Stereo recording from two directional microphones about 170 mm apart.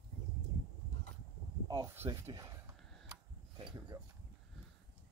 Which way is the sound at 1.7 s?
25° right (ahead or behind).